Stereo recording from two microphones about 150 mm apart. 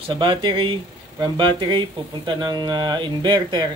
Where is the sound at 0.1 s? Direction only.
30° right (ahead or behind).